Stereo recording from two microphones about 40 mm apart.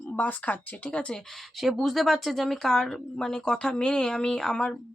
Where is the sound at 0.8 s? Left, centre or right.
Left.